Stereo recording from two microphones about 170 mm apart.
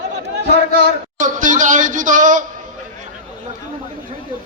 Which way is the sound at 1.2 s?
50° right (ahead or behind).